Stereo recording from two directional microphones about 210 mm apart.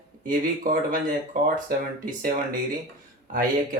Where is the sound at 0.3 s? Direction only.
40° right (ahead or behind).